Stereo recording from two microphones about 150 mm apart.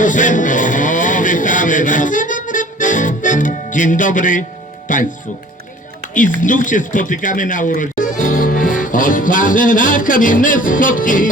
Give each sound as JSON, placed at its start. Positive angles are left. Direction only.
{"t": 0.0, "sound": "a sound", "side_deg": 60}
{"t": 4.9, "sound": "speech", "side_deg": 60}
{"t": 6.1, "sound": "speech", "side_deg": 60}